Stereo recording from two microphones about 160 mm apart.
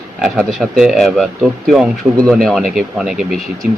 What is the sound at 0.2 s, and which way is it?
Speech, 5° right (ahead or behind).